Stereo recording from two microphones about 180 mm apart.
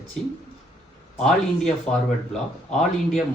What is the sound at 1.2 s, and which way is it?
Speech, 5° left (ahead or behind).